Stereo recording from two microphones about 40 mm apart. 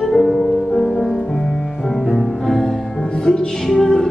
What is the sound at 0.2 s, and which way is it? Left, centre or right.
Music, centre.